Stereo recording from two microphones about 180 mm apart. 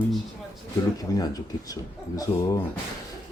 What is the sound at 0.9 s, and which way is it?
Speech, 20° left (ahead or behind).